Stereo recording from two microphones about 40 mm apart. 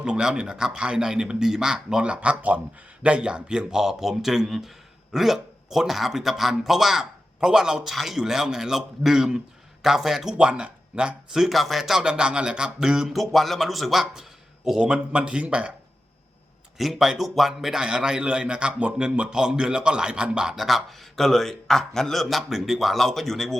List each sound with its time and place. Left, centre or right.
0.0 s speech: right
2.5 s speech: right
3.0 s speech: right
7.9 s a man's voice: centre
8.2 s speech: centre
10.3 s speech: right
11.3 s a man's voice: centre
12.0 s speech: right
13.1 s a man's voice: centre; by 15.7 s right
16.7 s a man's voice: centre
17.8 s speech: right
20.6 s a man's voice: centre